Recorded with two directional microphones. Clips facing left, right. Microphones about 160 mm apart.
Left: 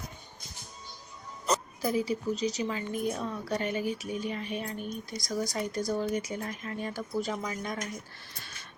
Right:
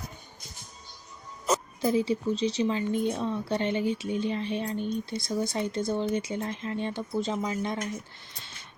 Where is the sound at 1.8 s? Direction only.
25° right (ahead or behind).